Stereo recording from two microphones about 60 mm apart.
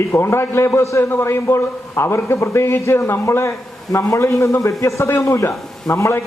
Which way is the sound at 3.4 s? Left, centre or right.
Left.